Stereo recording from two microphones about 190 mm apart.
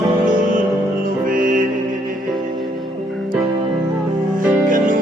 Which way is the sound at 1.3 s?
45° right (ahead or behind).